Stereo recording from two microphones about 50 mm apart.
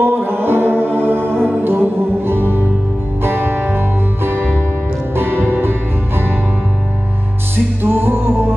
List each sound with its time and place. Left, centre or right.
0.0 s music: right
7.8 s music: right